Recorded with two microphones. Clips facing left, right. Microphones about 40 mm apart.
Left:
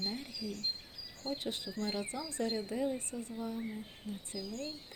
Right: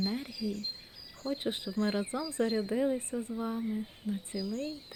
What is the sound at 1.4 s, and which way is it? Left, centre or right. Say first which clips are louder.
Speech: right 6 dB; right.